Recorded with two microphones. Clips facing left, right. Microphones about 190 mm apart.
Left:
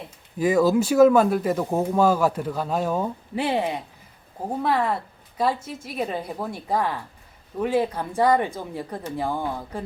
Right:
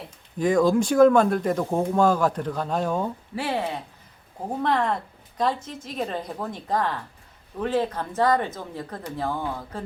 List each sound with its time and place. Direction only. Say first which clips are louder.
0.3 s speech: left 1 dB; 5° left (ahead or behind)
3.3 s a woman's voice: left 4 dB; 20° left (ahead or behind)
4.6 s a woman's voice: even; 5° left (ahead or behind)